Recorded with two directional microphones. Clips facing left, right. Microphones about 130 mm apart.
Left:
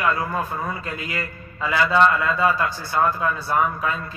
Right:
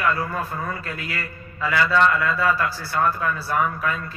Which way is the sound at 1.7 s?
20° left (ahead or behind).